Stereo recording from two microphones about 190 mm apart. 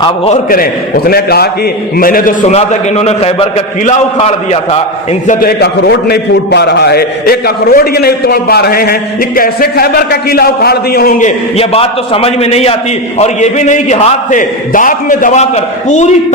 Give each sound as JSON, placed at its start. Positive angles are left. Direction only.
{"t": 0.5, "sound": "a man's voice", "side_deg": 50}
{"t": 2.5, "sound": "a man's voice", "side_deg": 35}
{"t": 5.2, "sound": "a man's voice", "side_deg": 45}
{"t": 11.5, "sound": "a man's voice", "side_deg": 30}